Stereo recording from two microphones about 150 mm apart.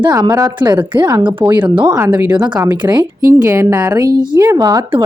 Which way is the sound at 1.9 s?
15° right (ahead or behind).